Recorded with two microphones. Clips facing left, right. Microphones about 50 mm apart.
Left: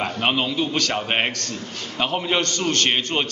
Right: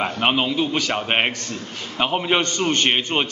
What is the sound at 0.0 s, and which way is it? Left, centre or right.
Speech, centre.